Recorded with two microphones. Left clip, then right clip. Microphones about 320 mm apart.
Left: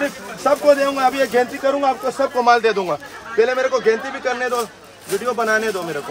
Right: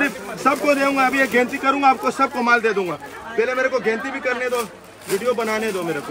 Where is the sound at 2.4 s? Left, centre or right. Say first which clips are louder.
Left 4 dB; centre.